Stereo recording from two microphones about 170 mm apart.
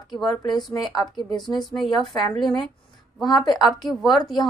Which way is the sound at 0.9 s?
25° left (ahead or behind).